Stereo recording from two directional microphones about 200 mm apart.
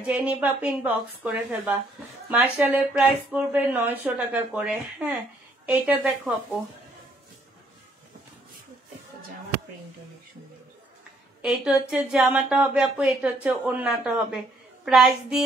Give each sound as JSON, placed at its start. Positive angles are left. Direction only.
{"t": 0.0, "sound": "a woman's voice", "side_deg": -5}
{"t": 11.4, "sound": "speech", "side_deg": -5}